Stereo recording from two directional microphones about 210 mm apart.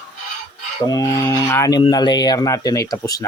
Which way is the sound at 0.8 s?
15° left (ahead or behind).